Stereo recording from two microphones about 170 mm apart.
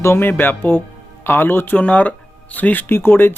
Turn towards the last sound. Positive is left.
turn(degrees=15)  # may be behind; listen again after turning